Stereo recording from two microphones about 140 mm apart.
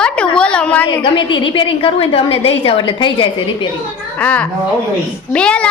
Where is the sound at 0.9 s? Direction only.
35° left (ahead or behind).